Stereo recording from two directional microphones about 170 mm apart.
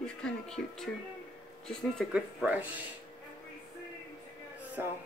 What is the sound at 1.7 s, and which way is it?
Speech, centre (ahead or behind).